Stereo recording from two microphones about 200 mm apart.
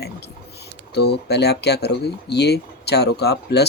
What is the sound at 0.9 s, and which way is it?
Speech, 55° left (ahead or behind).